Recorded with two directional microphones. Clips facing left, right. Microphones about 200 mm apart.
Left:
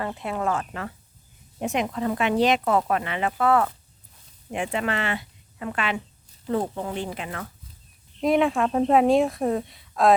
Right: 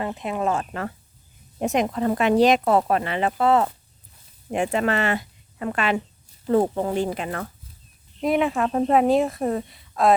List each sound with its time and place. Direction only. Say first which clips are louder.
0.2 s speech: right 2 dB; 20° right (ahead or behind)
0.6 s speech: right 4 dB; 40° right (ahead or behind); by 3.7 s 25° right (ahead or behind)
4.5 s speech: right 4 dB; 40° right (ahead or behind)
8.2 s speech: left 1 dB; centre (ahead or behind)